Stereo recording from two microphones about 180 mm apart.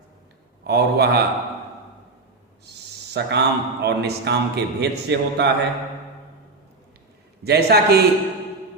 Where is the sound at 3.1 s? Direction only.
70° right (ahead or behind).